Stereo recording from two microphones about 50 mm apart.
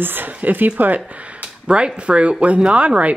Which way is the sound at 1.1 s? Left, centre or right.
Right.